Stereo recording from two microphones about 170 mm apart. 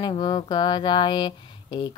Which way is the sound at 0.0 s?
25° left (ahead or behind).